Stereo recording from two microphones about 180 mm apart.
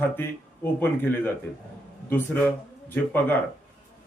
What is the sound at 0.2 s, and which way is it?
A man's voice, 10° left (ahead or behind).